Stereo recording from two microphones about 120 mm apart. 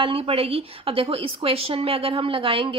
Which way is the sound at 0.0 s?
50° right (ahead or behind).